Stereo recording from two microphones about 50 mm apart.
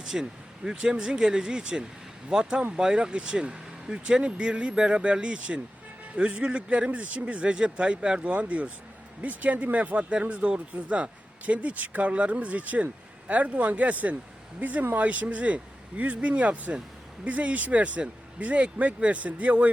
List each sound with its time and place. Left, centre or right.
0.0 s speech: centre; by 19.7 s right